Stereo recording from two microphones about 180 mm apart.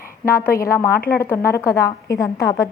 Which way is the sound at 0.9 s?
60° left (ahead or behind).